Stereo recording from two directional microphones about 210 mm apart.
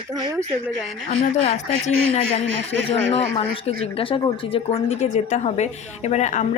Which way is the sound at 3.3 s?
30° left (ahead or behind).